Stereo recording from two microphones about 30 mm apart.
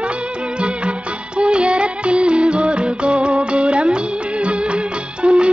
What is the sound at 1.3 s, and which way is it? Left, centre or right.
Music, right.